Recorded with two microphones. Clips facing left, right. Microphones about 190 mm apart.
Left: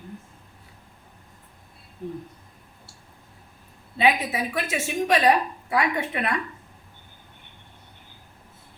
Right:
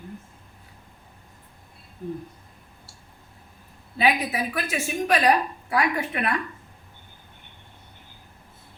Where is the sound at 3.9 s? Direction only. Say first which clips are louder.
Left 1 dB; 25° left (ahead or behind).